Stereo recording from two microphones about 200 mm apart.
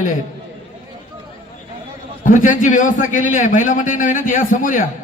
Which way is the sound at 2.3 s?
40° left (ahead or behind).